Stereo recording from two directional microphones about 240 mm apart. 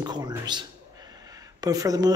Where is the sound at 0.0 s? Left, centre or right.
Centre.